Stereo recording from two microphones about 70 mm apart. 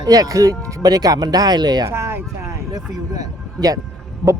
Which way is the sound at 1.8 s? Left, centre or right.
Right.